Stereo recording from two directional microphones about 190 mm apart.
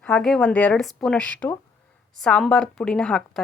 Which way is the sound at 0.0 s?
5° left (ahead or behind).